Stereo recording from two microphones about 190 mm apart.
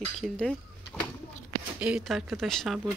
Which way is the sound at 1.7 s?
5° right (ahead or behind).